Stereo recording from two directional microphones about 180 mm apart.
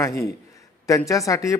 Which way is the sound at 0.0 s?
15° left (ahead or behind).